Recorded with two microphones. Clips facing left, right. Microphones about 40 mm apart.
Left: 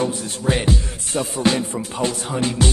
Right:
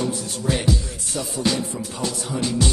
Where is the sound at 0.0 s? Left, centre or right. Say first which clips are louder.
Left 3 dB; left.